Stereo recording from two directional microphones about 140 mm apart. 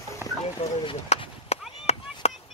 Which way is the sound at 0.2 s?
15° right (ahead or behind).